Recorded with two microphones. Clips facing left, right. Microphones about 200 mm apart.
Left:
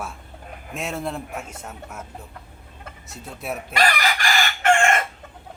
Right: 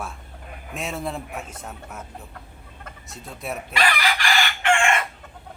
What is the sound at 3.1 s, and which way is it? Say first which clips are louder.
Speech: left 1 dB; centre (ahead or behind).